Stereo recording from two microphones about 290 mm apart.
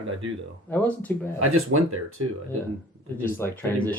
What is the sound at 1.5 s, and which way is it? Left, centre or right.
Speech, right.